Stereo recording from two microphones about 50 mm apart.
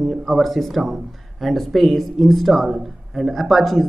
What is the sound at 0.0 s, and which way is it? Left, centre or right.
Speech, centre.